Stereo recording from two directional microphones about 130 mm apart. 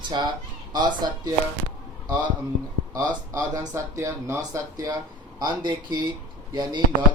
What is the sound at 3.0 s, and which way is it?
Speech, 30° right (ahead or behind).